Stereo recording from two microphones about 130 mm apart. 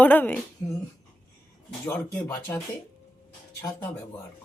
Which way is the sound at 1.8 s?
15° left (ahead or behind).